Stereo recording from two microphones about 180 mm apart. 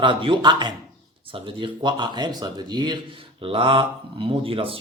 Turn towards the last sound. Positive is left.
turn(degrees=-30)  # may be behind; listen again after turning